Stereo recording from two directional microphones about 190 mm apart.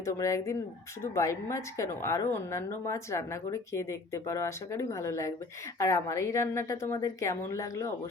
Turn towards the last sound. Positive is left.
turn(degrees=15)  # may be behind; listen again after turning